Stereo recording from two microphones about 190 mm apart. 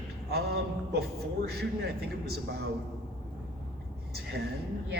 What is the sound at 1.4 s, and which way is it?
Speech, 55° right (ahead or behind).